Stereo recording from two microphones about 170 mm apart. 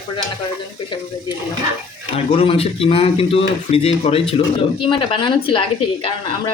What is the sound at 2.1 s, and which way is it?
Speech, 30° left (ahead or behind).